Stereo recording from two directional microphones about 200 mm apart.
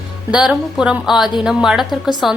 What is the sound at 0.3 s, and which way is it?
A woman's voice, 5° right (ahead or behind).